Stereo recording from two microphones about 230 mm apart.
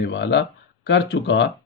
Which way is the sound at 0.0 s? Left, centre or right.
Left.